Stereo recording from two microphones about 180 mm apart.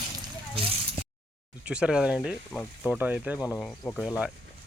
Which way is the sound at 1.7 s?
5° right (ahead or behind).